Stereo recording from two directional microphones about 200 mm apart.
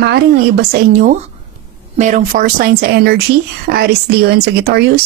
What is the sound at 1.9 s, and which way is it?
Speech, 40° right (ahead or behind).